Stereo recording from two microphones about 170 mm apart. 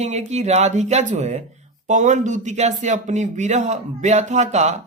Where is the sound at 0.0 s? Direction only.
40° right (ahead or behind).